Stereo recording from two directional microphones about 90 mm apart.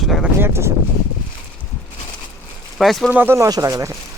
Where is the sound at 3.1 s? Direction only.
20° right (ahead or behind).